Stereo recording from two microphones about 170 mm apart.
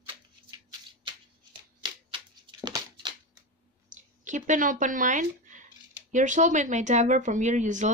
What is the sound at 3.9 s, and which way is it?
Speech, 45° right (ahead or behind).